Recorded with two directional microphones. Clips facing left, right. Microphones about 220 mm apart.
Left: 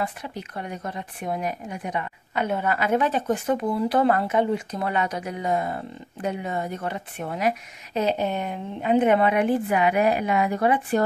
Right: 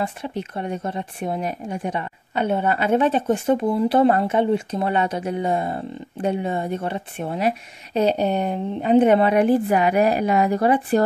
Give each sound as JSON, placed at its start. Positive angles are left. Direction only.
{"t": 0.0, "sound": "speech", "side_deg": -25}